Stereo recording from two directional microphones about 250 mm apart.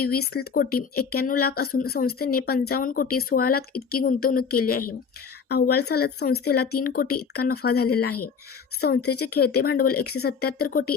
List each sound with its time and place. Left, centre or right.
0.3 s speech: left
9.0 s speech: left
9.2 s speech: left